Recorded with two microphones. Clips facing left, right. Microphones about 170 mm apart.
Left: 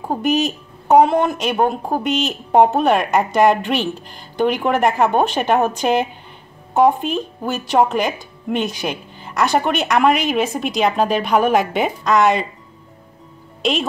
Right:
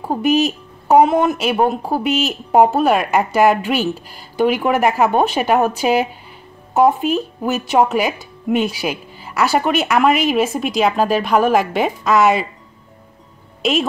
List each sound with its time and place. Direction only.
0.0 s speech: 5° right (ahead or behind)
13.6 s speech: 5° right (ahead or behind)